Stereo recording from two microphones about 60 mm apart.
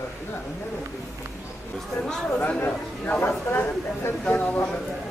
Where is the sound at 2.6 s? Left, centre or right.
Left.